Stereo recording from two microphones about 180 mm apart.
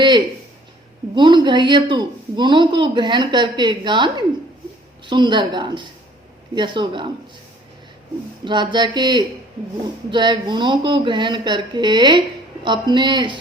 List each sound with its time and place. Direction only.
1.1 s speech: 25° right (ahead or behind)
8.4 s speech: 25° right (ahead or behind)